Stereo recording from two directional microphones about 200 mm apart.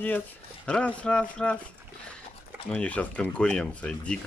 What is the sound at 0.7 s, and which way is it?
Speech, 5° left (ahead or behind).